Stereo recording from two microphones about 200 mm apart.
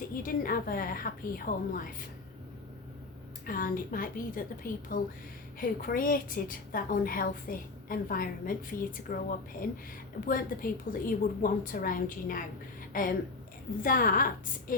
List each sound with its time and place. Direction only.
0.1 s a woman's voice: 45° left (ahead or behind)
3.4 s a woman's voice: 45° left (ahead or behind)